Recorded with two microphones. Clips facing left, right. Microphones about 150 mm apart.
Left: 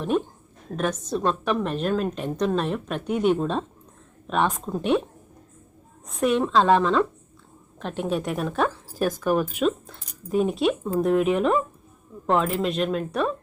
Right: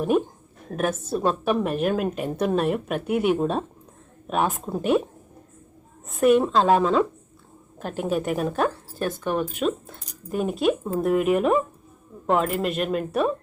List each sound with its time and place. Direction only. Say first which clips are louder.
0.1 s a woman's voice: right 2 dB; 10° right (ahead or behind)
6.1 s speech: right 4 dB; centre (ahead or behind)